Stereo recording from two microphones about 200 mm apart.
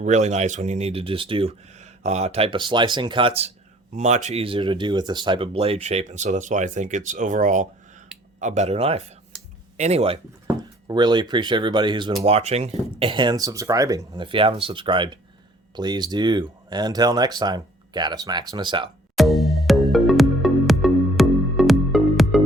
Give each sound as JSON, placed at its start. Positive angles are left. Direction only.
{"t": 0.0, "sound": "speech", "side_deg": -35}
{"t": 10.4, "sound": "speech", "side_deg": -20}
{"t": 19.1, "sound": "music", "side_deg": 0}